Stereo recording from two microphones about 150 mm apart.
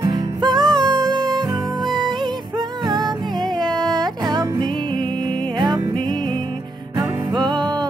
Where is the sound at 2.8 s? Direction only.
25° right (ahead or behind).